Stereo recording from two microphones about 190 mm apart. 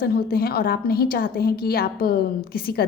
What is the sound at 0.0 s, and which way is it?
A woman's voice, 50° left (ahead or behind).